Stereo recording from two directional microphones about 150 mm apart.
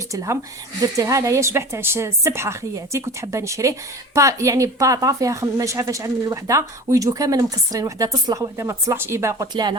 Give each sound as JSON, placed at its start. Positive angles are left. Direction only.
{"t": 0.1, "sound": "a woman's voice", "side_deg": -20}